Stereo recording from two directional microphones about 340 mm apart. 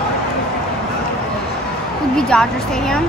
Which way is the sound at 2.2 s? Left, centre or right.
Centre.